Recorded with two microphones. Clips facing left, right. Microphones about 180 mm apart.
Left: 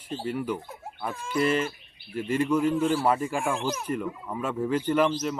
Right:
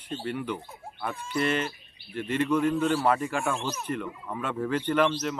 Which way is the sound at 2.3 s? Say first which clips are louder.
Left 1 dB; 10° left (ahead or behind).